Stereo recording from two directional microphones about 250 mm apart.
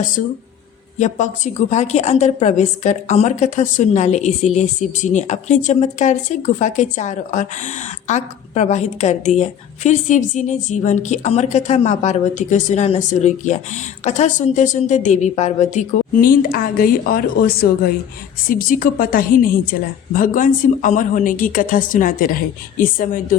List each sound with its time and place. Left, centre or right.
0.9 s a woman's voice: left